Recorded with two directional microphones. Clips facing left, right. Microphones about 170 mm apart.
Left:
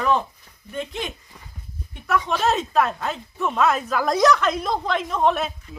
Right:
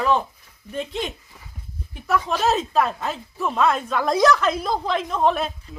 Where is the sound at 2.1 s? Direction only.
Centre (ahead or behind).